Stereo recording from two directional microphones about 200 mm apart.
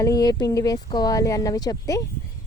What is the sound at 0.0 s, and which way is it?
Speech, 20° left (ahead or behind).